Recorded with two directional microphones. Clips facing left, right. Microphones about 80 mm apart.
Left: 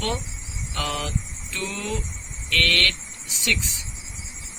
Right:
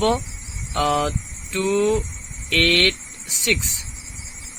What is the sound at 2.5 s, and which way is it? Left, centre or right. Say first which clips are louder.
Speech: right 4 dB; right.